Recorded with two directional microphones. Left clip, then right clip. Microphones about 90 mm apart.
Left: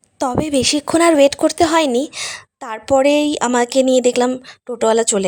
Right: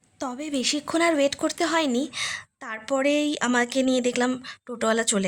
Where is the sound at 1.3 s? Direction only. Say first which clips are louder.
Left 10 dB; 90° left; by 4.3 s 65° left (ahead or behind).